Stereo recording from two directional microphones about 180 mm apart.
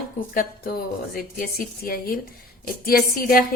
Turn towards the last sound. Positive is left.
turn(degrees=55)  # may be behind; listen again after turning